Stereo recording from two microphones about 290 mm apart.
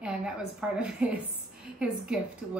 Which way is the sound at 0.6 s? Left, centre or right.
Centre.